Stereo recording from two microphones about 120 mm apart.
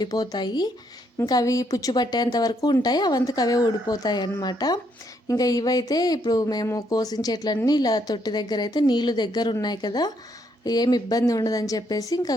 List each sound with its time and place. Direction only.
0.0 s speech: 35° left (ahead or behind)